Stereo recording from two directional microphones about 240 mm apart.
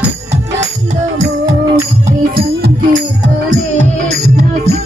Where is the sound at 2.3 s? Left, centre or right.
Right.